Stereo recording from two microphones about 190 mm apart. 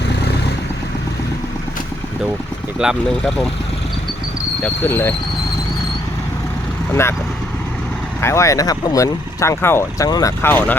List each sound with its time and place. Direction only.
2.7 s speech: 5° right (ahead or behind)
4.6 s speech: 10° left (ahead or behind)
8.2 s speech: 15° left (ahead or behind)